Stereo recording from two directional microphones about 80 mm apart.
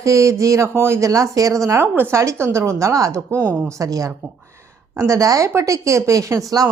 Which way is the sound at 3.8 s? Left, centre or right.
Right.